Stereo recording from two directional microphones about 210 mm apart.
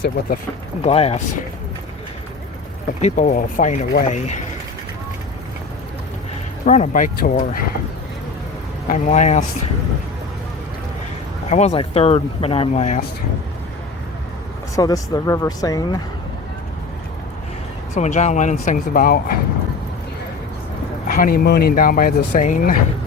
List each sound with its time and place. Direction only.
0.8 s speech: 30° left (ahead or behind)
3.0 s speech: 35° left (ahead or behind)
6.7 s speech: 40° left (ahead or behind)
8.9 s speech: 35° left (ahead or behind)
11.4 s speech: 30° left (ahead or behind)
14.8 s speech: 15° left (ahead or behind)
17.9 s speech: 35° left (ahead or behind)
21.1 s speech: 45° left (ahead or behind)